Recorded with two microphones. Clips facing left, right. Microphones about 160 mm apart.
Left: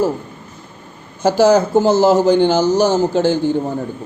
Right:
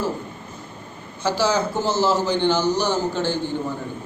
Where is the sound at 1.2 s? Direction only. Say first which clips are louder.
Left 9 dB; 50° left (ahead or behind).